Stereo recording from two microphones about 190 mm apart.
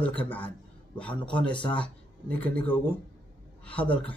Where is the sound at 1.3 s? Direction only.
25° left (ahead or behind).